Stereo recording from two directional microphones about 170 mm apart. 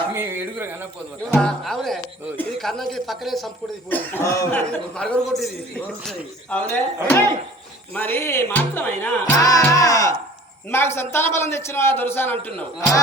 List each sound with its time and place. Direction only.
0.1 s speech: 15° right (ahead or behind)
1.3 s speech: 5° left (ahead or behind)
3.8 s a man's voice: 10° left (ahead or behind)